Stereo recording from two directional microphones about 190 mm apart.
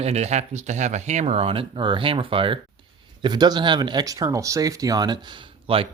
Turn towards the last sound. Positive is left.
turn(degrees=-25)  # may be behind; listen again after turning